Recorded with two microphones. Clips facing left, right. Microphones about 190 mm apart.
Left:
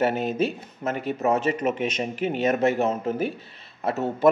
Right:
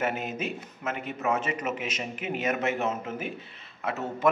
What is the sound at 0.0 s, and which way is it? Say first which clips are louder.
A man's voice: left 7 dB; 35° left (ahead or behind).